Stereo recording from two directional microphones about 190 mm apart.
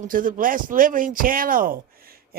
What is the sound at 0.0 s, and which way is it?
Speech, 45° right (ahead or behind).